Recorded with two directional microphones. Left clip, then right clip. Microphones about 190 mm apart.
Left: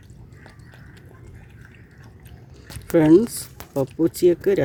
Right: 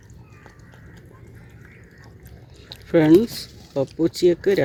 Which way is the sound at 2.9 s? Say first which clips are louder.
Even; 10° left (ahead or behind).